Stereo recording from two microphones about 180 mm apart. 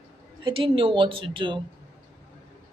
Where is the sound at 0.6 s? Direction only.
30° right (ahead or behind).